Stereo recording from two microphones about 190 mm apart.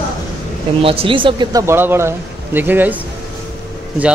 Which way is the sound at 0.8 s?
30° right (ahead or behind).